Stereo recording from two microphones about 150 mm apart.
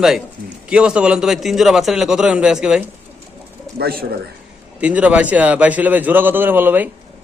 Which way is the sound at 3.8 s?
90° right.